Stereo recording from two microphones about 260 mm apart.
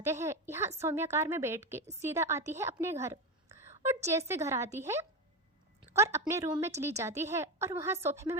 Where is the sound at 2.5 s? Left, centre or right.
Centre.